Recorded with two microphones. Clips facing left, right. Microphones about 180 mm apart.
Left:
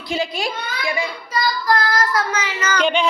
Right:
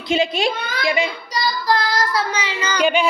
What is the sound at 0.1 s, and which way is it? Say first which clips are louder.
A woman's voice: right 4 dB; 25° right (ahead or behind).